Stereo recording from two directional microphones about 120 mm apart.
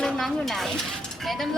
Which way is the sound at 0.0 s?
Centre (ahead or behind).